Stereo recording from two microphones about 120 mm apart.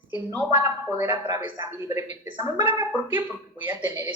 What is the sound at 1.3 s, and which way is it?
Speech, 20° right (ahead or behind).